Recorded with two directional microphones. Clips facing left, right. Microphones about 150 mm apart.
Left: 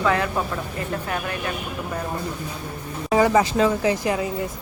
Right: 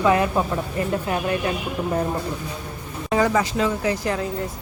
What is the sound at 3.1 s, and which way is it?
Speech, 20° left (ahead or behind).